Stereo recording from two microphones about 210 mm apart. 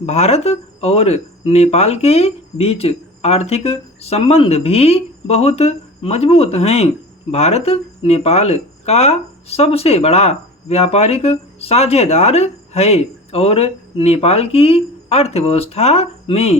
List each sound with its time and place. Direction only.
0.0 s speech: 30° left (ahead or behind)